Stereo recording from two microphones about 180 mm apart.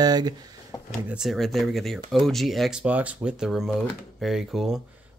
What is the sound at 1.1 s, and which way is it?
Speech, centre (ahead or behind).